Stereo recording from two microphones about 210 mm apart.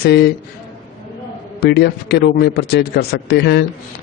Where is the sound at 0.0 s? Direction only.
50° left (ahead or behind).